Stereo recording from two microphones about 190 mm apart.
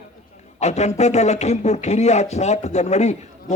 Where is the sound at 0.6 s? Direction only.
35° left (ahead or behind).